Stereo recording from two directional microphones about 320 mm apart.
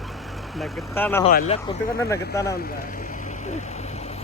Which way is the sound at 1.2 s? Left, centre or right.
Left.